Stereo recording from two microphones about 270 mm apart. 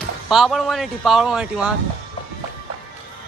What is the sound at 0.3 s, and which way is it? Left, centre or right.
A man's voice, centre.